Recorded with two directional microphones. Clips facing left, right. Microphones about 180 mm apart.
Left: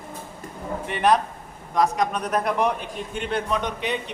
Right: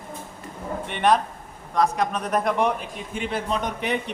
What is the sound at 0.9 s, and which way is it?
Speech, centre (ahead or behind).